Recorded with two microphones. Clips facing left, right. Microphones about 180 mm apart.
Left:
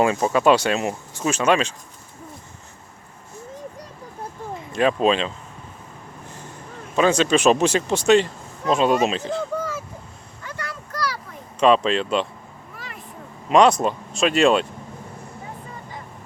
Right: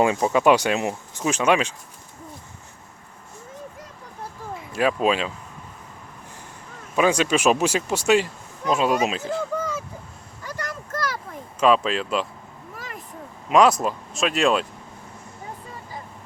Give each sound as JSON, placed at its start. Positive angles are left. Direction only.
{"t": 0.3, "sound": "speech", "side_deg": -15}
{"t": 4.7, "sound": "speech", "side_deg": -5}
{"t": 6.9, "sound": "speech", "side_deg": -10}
{"t": 10.6, "sound": "a sound", "side_deg": -45}
{"t": 11.6, "sound": "speech", "side_deg": -5}
{"t": 12.7, "sound": "a sound", "side_deg": -45}
{"t": 13.5, "sound": "speech", "side_deg": 0}